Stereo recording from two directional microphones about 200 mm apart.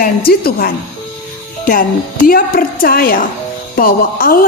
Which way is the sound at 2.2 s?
45° left (ahead or behind).